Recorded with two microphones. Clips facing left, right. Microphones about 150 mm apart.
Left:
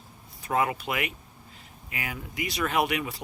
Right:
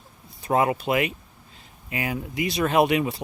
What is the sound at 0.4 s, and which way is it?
Speech, 30° right (ahead or behind).